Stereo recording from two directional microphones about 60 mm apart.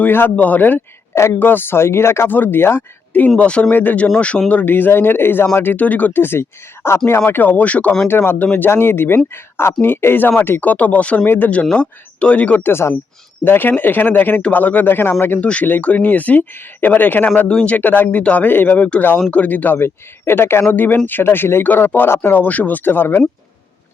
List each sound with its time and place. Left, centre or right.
0.0 s speech: left
1.1 s a woman's voice: left
1.4 s speech: left
2.3 s speech: left
3.2 s speech: left
5.7 s speech: left
7.3 s speech: left
8.0 s speech: left
10.6 s speech: left
11.6 s speech: centre
12.6 s speech: left
17.5 s a man's voice: centre
17.7 s speech: left
22.4 s speech: left